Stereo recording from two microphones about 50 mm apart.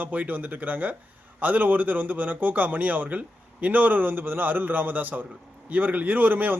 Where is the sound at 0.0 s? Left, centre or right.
Right.